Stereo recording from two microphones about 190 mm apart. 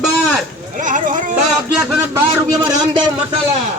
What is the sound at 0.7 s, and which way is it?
Speech, 45° right (ahead or behind).